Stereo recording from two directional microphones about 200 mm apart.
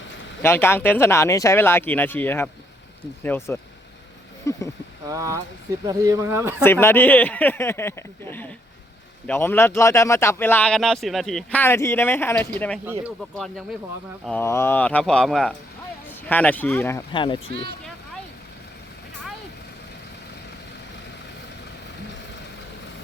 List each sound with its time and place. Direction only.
0.4 s a man's voice: 10° left (ahead or behind)
5.0 s speech: 15° right (ahead or behind)
6.6 s a man's voice: 10° left (ahead or behind)
17.1 s speech: 25° left (ahead or behind)